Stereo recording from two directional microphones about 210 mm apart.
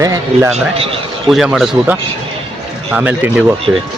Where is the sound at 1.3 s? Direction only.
Centre (ahead or behind).